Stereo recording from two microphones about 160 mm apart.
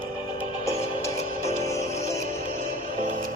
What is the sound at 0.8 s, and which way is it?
Music, 40° left (ahead or behind).